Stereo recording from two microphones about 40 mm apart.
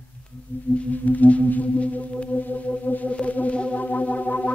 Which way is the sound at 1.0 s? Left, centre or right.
Left.